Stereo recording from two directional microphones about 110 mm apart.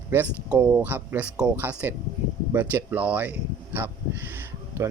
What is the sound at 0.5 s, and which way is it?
Speech, 10° right (ahead or behind).